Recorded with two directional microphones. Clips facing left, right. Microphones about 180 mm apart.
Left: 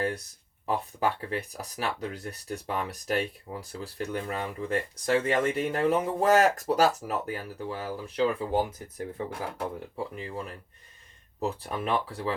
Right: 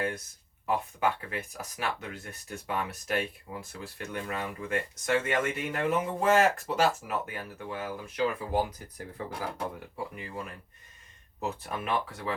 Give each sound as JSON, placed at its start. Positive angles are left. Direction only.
{"t": 0.6, "sound": "speech", "side_deg": 35}